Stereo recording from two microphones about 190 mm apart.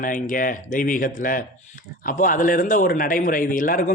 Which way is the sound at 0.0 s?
45° left (ahead or behind).